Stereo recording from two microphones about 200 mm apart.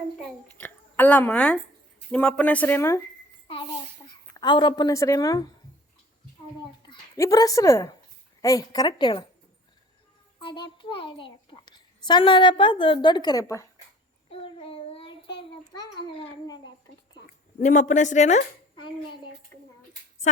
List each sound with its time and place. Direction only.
0.5 s speech: 10° left (ahead or behind)
3.4 s a sound: 25° left (ahead or behind)
4.4 s a child's voice: 25° left (ahead or behind)
6.8 s a child's voice: 20° left (ahead or behind)
10.4 s a child's voice: 25° left (ahead or behind)
14.3 s child singing: 30° left (ahead or behind)
17.6 s speech: 40° left (ahead or behind)
20.2 s a sound: 40° left (ahead or behind)